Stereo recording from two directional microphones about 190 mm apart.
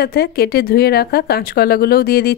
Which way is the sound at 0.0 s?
55° left (ahead or behind).